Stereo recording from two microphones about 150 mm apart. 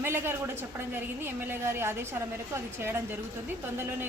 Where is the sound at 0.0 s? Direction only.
15° right (ahead or behind).